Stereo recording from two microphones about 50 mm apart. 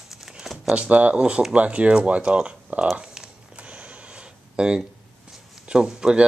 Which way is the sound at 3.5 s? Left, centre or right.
Right.